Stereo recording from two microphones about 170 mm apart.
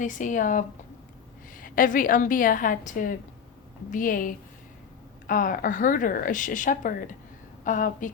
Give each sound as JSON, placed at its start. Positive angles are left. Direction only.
{"t": 0.0, "sound": "a woman's voice", "side_deg": 50}